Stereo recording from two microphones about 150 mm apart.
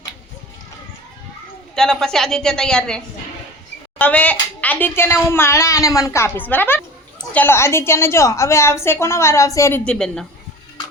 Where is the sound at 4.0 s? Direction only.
10° left (ahead or behind).